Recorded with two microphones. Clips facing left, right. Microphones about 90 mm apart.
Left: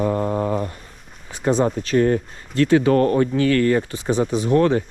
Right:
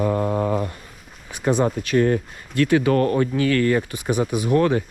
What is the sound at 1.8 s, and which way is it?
Speech, 35° left (ahead or behind).